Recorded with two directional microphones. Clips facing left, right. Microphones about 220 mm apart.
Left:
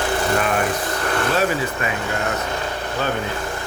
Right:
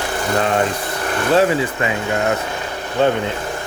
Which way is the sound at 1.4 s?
25° right (ahead or behind).